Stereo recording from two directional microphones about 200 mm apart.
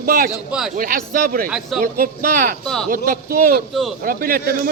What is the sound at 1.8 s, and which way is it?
Speech, 45° right (ahead or behind).